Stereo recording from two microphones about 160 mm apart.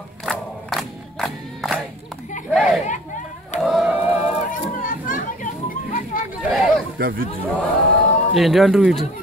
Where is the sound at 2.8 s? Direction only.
50° left (ahead or behind).